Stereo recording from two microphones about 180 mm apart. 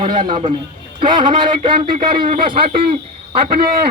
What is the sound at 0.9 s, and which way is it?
A man's voice, 25° right (ahead or behind).